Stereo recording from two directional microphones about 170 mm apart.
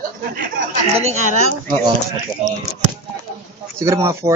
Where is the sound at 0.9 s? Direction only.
40° right (ahead or behind).